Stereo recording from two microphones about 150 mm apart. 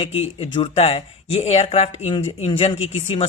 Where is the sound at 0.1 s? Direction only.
40° left (ahead or behind).